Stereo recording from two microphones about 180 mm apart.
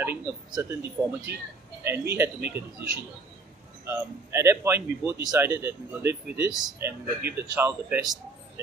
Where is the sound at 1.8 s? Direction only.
15° right (ahead or behind).